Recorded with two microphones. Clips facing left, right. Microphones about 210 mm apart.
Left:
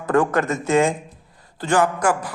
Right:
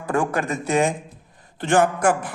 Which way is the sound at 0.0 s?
10° right (ahead or behind).